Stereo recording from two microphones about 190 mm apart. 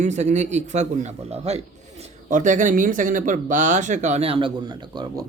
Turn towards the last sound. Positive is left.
turn(degrees=-20)  # may be behind; listen again after turning